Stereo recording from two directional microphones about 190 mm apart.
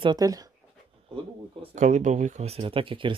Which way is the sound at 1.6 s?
40° right (ahead or behind).